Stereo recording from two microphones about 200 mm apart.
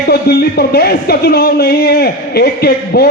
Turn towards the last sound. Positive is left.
turn(degrees=50)  # may be behind; listen again after turning